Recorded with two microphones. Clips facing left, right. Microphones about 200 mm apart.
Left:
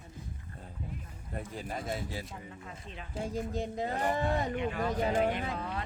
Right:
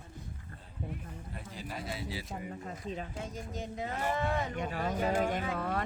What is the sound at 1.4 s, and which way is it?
Speech, 50° left (ahead or behind).